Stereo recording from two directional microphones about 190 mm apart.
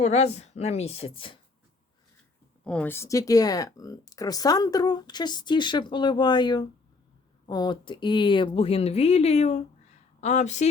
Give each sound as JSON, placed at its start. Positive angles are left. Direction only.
{"t": 0.0, "sound": "a woman's voice", "side_deg": 35}
{"t": 2.6, "sound": "a woman's voice", "side_deg": 10}